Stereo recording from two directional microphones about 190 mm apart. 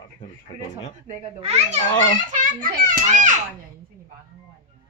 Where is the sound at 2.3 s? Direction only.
45° right (ahead or behind).